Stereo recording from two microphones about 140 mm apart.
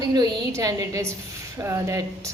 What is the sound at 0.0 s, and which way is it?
A woman's voice, 30° right (ahead or behind).